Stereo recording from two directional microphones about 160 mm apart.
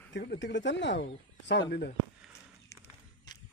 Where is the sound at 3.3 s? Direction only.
25° left (ahead or behind).